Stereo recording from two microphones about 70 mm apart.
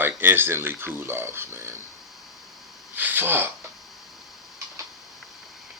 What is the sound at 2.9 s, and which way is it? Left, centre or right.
Speech, right.